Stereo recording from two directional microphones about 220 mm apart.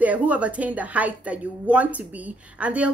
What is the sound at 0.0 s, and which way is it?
A woman's voice, 5° right (ahead or behind).